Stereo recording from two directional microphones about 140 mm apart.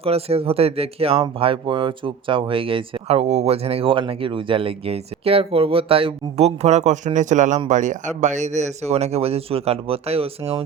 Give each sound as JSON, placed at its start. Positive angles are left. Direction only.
{"t": 0.0, "sound": "a man's voice", "side_deg": -45}